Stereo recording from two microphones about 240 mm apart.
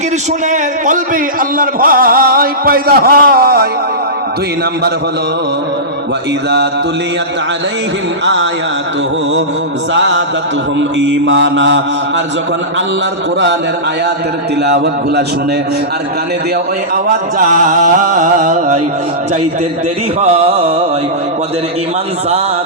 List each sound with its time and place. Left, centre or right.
0.5 s music: right
8.2 s mantra: right
9.9 s mantra: right
14.6 s mantra: right
16.9 s music: right
20.2 s music: right